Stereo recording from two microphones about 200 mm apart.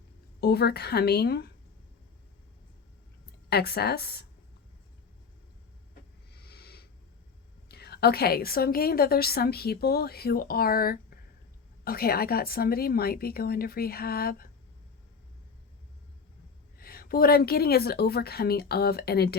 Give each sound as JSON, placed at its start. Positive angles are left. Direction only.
{"t": 0.3, "sound": "a woman's voice", "side_deg": 55}
{"t": 3.5, "sound": "a woman's voice", "side_deg": 50}
{"t": 6.3, "sound": "a sound", "side_deg": 55}
{"t": 7.7, "sound": "a woman's voice", "side_deg": 50}
{"t": 16.7, "sound": "a woman's voice", "side_deg": 50}